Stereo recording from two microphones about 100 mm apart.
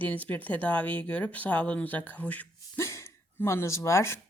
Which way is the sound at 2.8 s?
30° left (ahead or behind).